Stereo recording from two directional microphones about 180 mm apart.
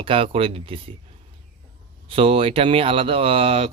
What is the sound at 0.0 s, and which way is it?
Speech, 30° right (ahead or behind).